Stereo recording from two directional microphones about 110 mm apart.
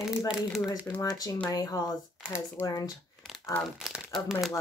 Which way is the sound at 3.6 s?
Centre (ahead or behind).